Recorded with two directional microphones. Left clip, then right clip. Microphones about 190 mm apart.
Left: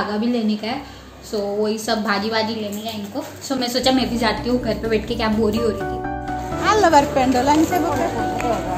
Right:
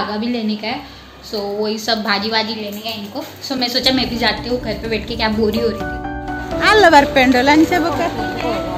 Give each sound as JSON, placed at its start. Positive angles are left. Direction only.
{"t": 0.1, "sound": "a woman's voice", "side_deg": 20}
{"t": 3.4, "sound": "a woman's voice", "side_deg": 15}
{"t": 6.6, "sound": "a woman's voice", "side_deg": -45}